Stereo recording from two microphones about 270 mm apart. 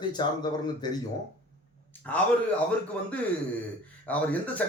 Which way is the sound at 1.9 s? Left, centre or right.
Centre.